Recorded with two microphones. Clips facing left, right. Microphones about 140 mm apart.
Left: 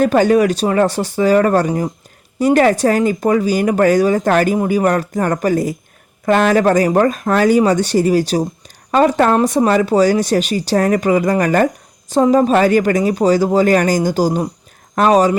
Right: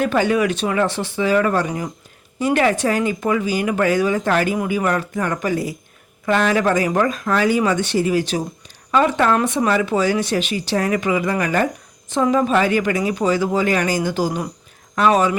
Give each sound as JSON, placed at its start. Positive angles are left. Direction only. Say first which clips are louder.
{"t": 0.0, "sound": "speech", "louder": "left 6 dB", "side_deg": 40}